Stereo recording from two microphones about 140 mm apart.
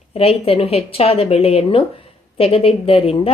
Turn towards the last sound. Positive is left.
turn(degrees=45)  # may be behind; listen again after turning